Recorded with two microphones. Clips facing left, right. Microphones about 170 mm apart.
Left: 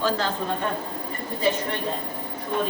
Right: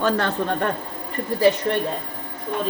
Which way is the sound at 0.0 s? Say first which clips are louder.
Right 3 dB; 65° right (ahead or behind).